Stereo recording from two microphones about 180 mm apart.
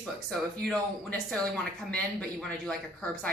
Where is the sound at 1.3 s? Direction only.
5° left (ahead or behind).